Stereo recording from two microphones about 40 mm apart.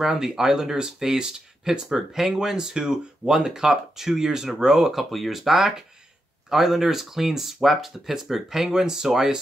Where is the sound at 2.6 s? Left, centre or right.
Centre.